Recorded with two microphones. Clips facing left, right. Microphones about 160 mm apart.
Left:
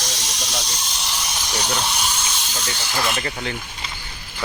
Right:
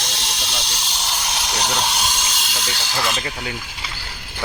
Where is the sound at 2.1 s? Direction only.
90° right.